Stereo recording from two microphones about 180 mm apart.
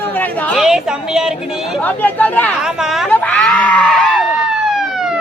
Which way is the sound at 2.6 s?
Centre (ahead or behind).